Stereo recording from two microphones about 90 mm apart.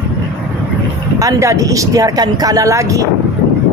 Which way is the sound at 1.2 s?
40° right (ahead or behind).